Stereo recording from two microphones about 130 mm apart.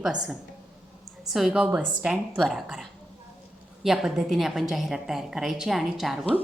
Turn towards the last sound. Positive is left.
turn(degrees=0)  # may be behind; listen again after turning